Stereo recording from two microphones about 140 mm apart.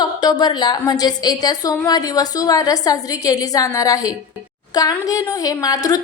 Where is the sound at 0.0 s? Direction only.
30° left (ahead or behind).